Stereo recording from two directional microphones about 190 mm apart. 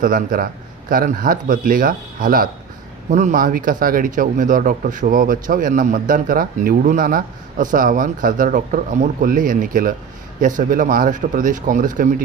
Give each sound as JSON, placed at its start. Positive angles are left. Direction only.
{"t": 0.0, "sound": "speech", "side_deg": -45}